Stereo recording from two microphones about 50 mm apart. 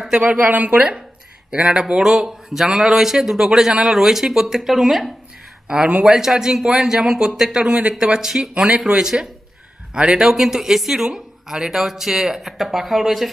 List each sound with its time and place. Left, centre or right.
0.1 s a woman's voice: right
1.5 s a man's voice: centre
5.7 s a woman's voice: right
6.0 s a man's voice: centre
8.6 s a woman's voice: right
8.9 s a man's voice: centre